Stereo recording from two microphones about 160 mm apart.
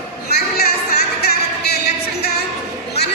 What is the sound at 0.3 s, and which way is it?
Music, 80° left.